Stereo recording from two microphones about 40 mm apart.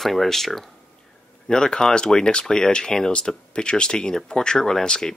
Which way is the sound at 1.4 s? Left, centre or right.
Centre.